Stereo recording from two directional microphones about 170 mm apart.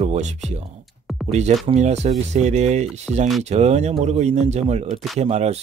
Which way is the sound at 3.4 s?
40° right (ahead or behind).